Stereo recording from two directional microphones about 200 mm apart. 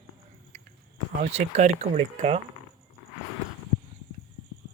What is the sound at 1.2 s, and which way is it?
Speech, 30° right (ahead or behind).